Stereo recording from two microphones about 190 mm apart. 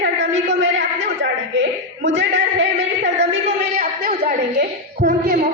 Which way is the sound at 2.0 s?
70° right (ahead or behind).